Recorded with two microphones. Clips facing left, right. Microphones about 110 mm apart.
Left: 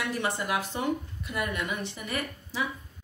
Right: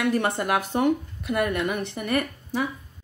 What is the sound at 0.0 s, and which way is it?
Speech, 55° right (ahead or behind).